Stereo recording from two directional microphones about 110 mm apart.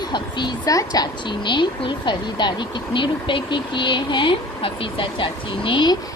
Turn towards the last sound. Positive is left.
turn(degrees=45)  # may be behind; listen again after turning